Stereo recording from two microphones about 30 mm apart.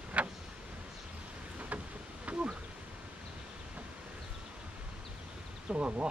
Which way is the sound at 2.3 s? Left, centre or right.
Right.